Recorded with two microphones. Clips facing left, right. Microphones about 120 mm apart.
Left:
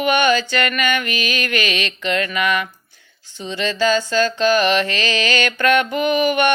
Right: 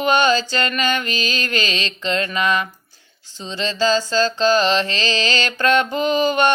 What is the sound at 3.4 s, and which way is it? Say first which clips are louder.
Music: left 2 dB; 30° right (ahead or behind).